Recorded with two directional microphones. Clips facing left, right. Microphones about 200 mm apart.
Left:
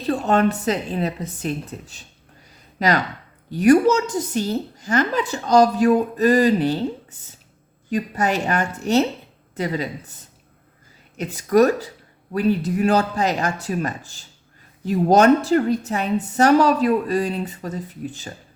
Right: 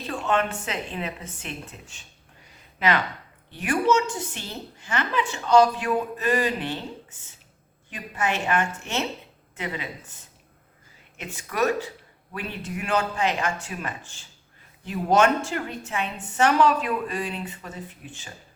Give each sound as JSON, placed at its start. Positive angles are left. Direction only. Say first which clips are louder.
{"t": 0.1, "sound": "a woman's voice", "louder": "left 7 dB", "side_deg": 40}
{"t": 7.9, "sound": "a woman's voice", "louder": "left 7 dB", "side_deg": 40}
{"t": 11.2, "sound": "a woman's voice", "louder": "left 10 dB", "side_deg": 40}